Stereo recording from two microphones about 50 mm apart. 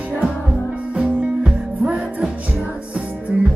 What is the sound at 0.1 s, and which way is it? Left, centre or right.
Music, centre.